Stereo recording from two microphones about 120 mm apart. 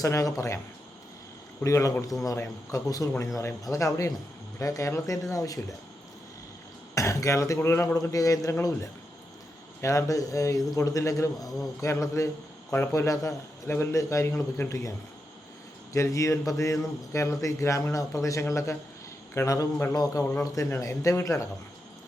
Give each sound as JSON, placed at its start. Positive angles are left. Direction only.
{"t": 0.0, "sound": "a man's voice", "side_deg": 30}
{"t": 1.6, "sound": "a man's voice", "side_deg": 25}
{"t": 6.9, "sound": "a man's voice", "side_deg": 25}